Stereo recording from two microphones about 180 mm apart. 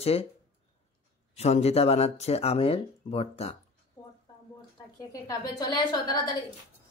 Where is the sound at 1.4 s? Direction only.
35° left (ahead or behind).